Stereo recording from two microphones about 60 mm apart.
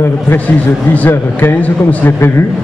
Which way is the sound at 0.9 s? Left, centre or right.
Left.